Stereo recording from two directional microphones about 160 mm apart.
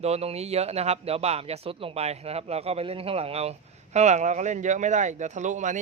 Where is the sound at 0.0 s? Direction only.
40° right (ahead or behind).